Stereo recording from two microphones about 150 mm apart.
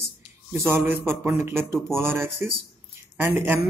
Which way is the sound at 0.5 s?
15° right (ahead or behind).